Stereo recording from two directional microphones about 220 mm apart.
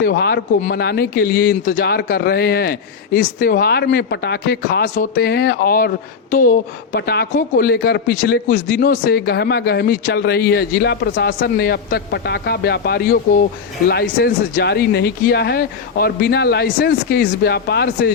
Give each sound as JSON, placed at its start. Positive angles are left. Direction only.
{"t": 0.0, "sound": "speech", "side_deg": 45}